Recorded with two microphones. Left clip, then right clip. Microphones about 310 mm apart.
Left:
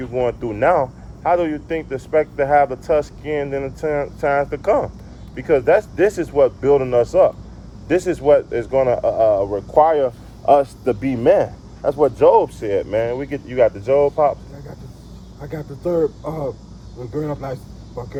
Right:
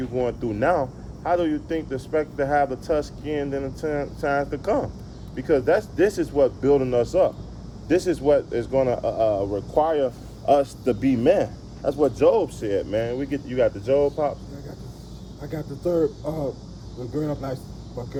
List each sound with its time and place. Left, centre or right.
0.1 s speech: centre
15.4 s speech: centre